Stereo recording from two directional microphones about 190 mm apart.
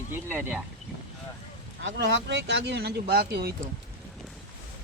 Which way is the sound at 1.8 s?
75° right (ahead or behind).